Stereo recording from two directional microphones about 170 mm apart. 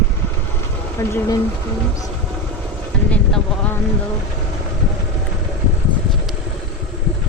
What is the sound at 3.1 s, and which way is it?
Vehicle, 10° left (ahead or behind).